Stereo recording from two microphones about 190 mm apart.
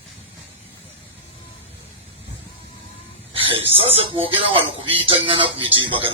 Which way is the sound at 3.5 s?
30° right (ahead or behind).